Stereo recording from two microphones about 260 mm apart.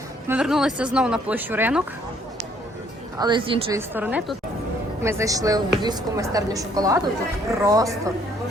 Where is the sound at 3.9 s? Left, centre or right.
Centre.